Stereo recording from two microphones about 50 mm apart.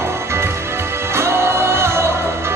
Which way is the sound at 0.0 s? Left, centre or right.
Right.